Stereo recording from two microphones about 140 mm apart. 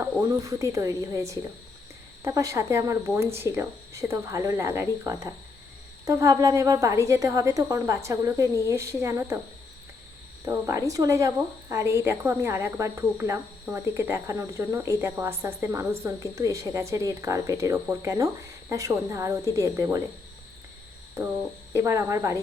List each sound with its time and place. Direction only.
0.0 s a woman's voice: 20° right (ahead or behind)
10.4 s a woman's voice: 20° right (ahead or behind)
21.7 s a woman's voice: 20° right (ahead or behind)